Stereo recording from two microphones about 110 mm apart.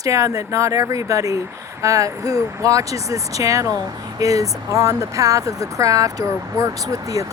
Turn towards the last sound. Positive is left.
turn(degrees=-30)  # may be behind; listen again after turning